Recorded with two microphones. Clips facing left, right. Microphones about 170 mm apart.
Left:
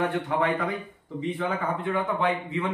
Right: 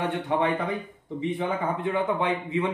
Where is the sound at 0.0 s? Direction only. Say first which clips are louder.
Even; 20° right (ahead or behind).